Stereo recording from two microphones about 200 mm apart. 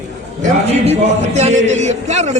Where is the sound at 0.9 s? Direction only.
35° right (ahead or behind).